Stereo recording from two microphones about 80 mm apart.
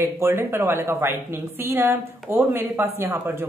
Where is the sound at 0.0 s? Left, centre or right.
Right.